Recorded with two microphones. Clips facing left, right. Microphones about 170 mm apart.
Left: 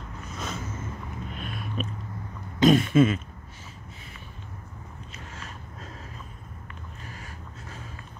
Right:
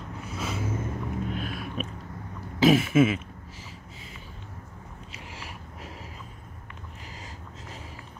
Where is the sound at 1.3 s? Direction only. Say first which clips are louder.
Right 2 dB; centre (ahead or behind).